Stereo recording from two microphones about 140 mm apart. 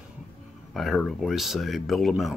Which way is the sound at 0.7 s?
Centre (ahead or behind).